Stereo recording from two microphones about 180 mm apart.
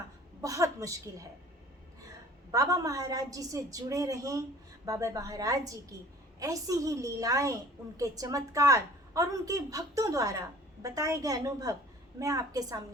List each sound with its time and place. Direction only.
0.4 s a woman's voice: 20° right (ahead or behind)
2.5 s a woman's voice: 20° right (ahead or behind)